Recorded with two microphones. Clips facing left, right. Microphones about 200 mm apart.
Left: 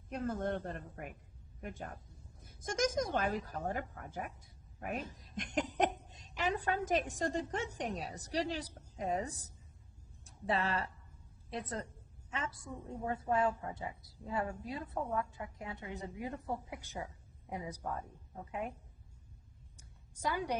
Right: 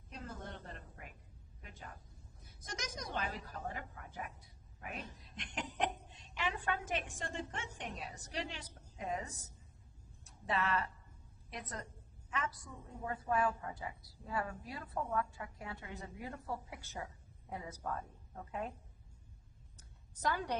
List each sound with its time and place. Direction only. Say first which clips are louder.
0.1 s a woman's voice: left 12 dB; 55° left (ahead or behind); by 18.0 s 15° left (ahead or behind)
20.2 s a woman's voice: left 1 dB; 10° left (ahead or behind)